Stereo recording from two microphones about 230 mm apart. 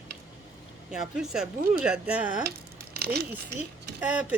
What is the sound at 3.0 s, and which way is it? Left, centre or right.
Speech, right.